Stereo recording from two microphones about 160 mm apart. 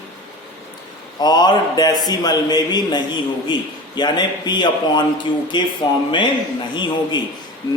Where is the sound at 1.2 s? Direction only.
25° left (ahead or behind).